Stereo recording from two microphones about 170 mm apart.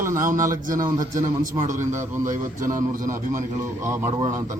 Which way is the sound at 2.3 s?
50° right (ahead or behind).